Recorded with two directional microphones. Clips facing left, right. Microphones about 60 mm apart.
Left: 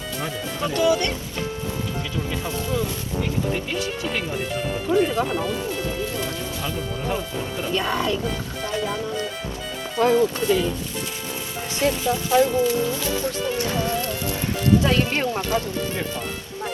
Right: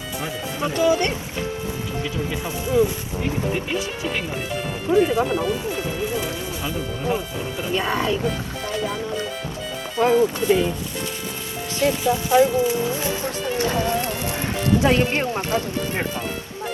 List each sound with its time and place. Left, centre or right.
0.6 s speech: right
2.3 s speech: centre
4.9 s speech: right
5.2 s speech: centre
6.1 s speech: centre
8.8 s speech: centre
10.0 s speech: centre
11.9 s speech: centre; by 16.0 s right